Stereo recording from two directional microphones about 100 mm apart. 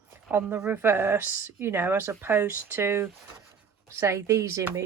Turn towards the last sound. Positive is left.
turn(degrees=-30)  # may be behind; listen again after turning